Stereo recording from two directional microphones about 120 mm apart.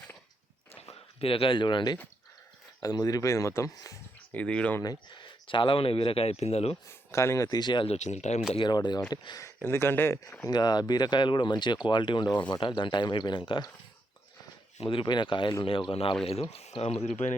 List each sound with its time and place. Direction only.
0.8 s speech: 55° left (ahead or behind); by 3.9 s 25° left (ahead or behind)
4.3 s speech: 10° left (ahead or behind)
5.5 s speech: 45° left (ahead or behind); by 6.7 s 60° left (ahead or behind)
7.1 s speech: 25° left (ahead or behind); by 7.9 s 40° left (ahead or behind)
7.9 s speech: 70° left (ahead or behind)
8.5 s speech: 40° left (ahead or behind)
9.6 s speech: 20° left (ahead or behind)
10.5 s speech: 35° left (ahead or behind)
14.8 s speech: 45° left (ahead or behind); by 17.2 s 70° left (ahead or behind)